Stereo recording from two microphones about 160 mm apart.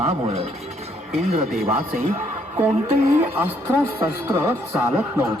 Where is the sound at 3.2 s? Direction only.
15° right (ahead or behind).